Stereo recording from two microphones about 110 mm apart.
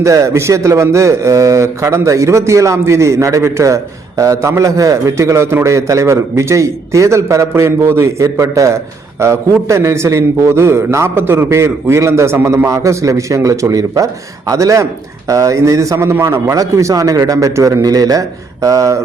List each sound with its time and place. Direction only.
0.0 s a man's voice: 30° right (ahead or behind)